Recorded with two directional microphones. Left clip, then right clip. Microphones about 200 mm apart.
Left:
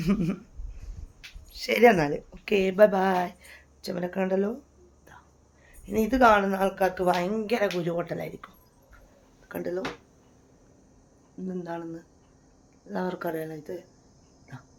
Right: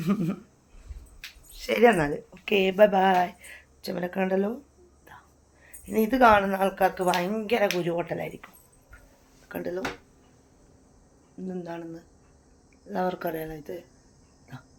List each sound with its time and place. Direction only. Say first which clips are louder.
0.0 s speech: even; 20° left (ahead or behind)
1.5 s speech: left 1 dB; 20° left (ahead or behind)
5.6 s speech: right 1 dB; 5° left (ahead or behind)
9.5 s speech: left 1 dB; 10° left (ahead or behind)
11.4 s speech: left 1 dB; 5° left (ahead or behind)
14.5 s dog: right 1 dB; 10° left (ahead or behind)